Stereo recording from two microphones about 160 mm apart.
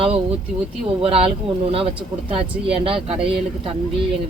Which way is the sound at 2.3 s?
35° right (ahead or behind).